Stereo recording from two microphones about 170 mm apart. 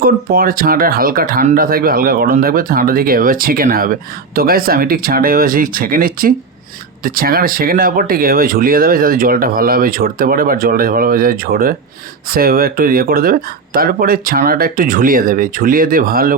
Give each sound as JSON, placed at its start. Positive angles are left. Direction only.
{"t": 0.0, "sound": "speech", "side_deg": -60}